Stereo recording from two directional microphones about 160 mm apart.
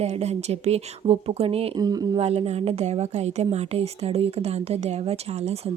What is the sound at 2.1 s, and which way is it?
A woman's voice, 40° right (ahead or behind).